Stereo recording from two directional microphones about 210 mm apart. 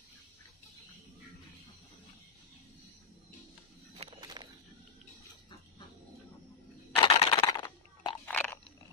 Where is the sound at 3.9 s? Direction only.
25° right (ahead or behind).